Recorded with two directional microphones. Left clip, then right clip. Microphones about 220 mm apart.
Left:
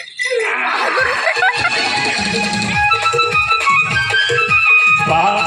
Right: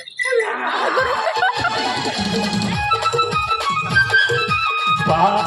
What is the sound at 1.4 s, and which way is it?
Music, 25° right (ahead or behind).